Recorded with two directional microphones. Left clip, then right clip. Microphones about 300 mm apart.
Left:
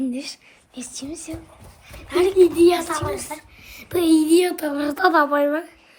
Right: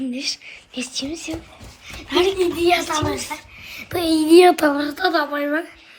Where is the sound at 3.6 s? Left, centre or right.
Centre.